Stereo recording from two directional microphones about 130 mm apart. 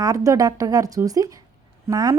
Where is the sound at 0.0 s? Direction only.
25° right (ahead or behind).